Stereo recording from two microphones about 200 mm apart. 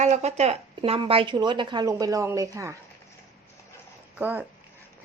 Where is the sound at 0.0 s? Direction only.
35° right (ahead or behind); by 2.7 s 15° right (ahead or behind).